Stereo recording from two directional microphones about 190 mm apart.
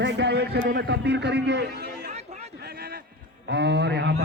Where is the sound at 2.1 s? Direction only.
35° right (ahead or behind).